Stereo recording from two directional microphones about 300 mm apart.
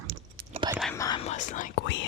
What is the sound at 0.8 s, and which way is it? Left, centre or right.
Whispering, centre.